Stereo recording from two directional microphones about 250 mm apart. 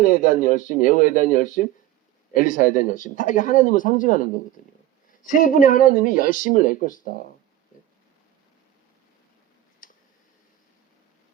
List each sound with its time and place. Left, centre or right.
0.0 s speech: left
9.8 s tick: left